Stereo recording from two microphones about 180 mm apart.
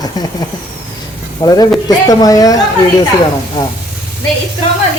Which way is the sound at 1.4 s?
20° left (ahead or behind).